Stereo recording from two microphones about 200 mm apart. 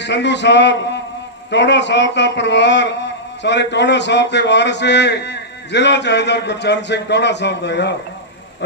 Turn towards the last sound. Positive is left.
turn(degrees=60)  # may be behind; listen again after turning